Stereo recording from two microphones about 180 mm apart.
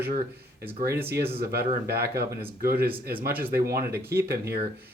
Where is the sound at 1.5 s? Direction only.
60° right (ahead or behind).